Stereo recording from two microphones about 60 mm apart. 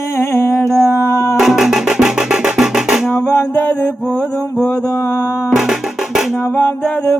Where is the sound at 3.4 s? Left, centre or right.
Left.